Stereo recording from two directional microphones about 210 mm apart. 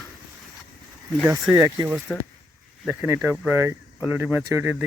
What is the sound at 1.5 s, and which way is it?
Speech, 20° right (ahead or behind).